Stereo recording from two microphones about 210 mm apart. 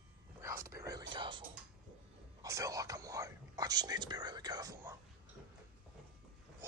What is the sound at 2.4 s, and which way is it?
Whispering, 15° right (ahead or behind).